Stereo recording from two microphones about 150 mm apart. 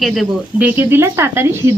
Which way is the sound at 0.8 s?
15° right (ahead or behind).